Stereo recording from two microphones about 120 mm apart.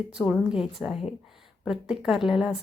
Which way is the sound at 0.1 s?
5° right (ahead or behind).